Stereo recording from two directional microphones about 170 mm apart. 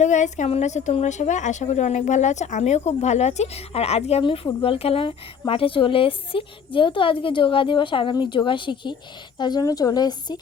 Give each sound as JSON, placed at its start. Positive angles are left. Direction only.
{"t": 0.0, "sound": "a woman's voice", "side_deg": 45}